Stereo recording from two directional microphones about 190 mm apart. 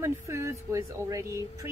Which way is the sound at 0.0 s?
15° right (ahead or behind).